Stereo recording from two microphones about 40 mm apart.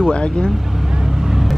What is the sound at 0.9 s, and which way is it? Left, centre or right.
Vehicle, centre.